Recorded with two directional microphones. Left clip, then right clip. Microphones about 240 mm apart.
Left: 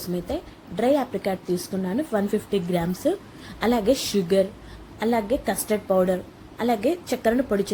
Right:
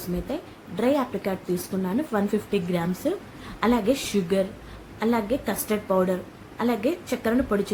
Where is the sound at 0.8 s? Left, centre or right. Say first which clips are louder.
Left 2 dB; centre.